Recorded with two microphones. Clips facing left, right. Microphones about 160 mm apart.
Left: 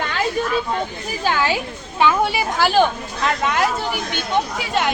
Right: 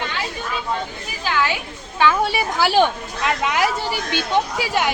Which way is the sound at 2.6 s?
10° right (ahead or behind).